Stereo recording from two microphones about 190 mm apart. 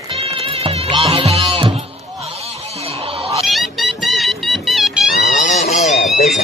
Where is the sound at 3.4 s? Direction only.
Centre (ahead or behind).